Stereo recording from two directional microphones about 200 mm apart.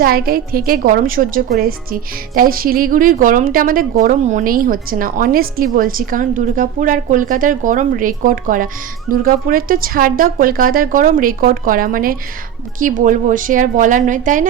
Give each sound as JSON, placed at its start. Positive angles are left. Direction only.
{"t": 0.0, "sound": "a woman's voice", "side_deg": -50}